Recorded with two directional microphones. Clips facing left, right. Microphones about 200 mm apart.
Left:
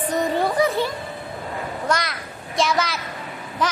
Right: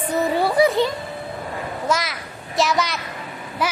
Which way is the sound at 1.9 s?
Centre (ahead or behind).